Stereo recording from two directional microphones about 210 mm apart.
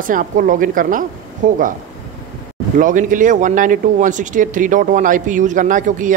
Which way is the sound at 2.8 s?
40° right (ahead or behind).